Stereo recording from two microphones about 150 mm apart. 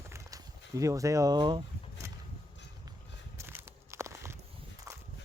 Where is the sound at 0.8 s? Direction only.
20° right (ahead or behind).